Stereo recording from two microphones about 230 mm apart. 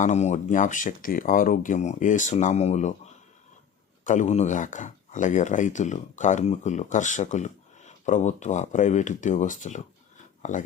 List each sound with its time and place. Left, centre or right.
0.0 s speech: left
4.0 s speech: left